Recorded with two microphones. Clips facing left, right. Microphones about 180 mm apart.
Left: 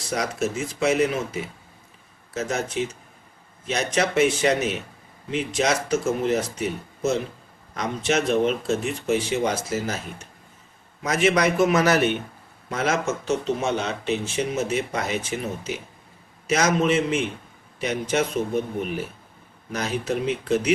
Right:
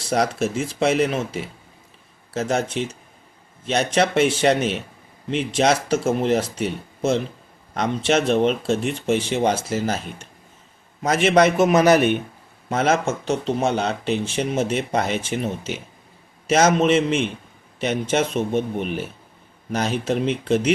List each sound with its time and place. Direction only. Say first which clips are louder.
0.1 s speech: right 4 dB; 30° right (ahead or behind)
12.7 s speech: right 4 dB; 25° right (ahead or behind)